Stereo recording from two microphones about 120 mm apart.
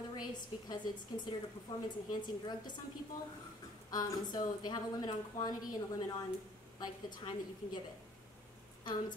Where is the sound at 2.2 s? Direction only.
35° left (ahead or behind).